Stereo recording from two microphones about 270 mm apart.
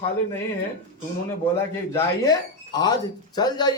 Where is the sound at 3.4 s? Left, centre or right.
Centre.